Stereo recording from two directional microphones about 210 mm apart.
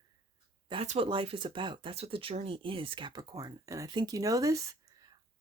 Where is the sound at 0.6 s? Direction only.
30° right (ahead or behind).